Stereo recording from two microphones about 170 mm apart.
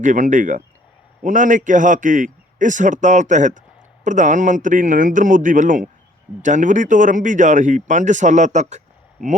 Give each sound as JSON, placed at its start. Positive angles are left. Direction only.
{"t": 0.0, "sound": "speech", "side_deg": -50}